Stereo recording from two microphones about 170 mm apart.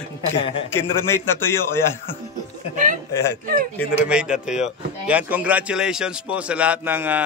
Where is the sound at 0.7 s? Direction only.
15° left (ahead or behind).